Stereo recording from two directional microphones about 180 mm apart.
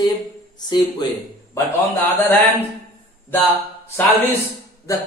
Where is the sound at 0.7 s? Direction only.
25° left (ahead or behind).